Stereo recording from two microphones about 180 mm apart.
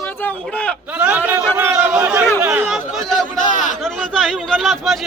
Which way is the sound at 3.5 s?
45° left (ahead or behind).